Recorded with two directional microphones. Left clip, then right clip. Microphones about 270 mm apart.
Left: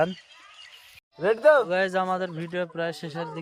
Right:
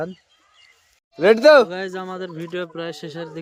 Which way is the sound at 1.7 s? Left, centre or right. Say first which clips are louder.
Left 5 dB; centre.